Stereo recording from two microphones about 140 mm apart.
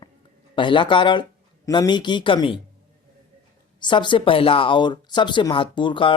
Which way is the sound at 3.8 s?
35° left (ahead or behind).